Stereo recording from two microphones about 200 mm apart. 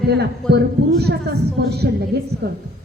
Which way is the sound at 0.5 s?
55° right (ahead or behind).